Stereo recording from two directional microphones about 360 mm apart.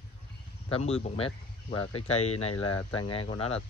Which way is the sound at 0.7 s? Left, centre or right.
Centre.